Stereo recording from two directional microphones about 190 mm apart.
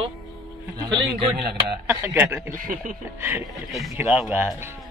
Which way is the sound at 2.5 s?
45° right (ahead or behind).